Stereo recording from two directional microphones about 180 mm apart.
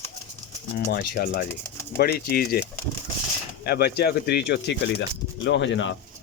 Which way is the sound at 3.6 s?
60° left (ahead or behind).